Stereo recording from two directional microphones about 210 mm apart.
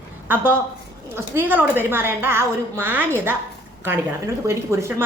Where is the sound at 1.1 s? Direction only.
10° right (ahead or behind).